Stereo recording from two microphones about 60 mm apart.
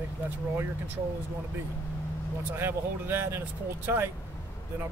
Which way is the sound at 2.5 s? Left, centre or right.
Right.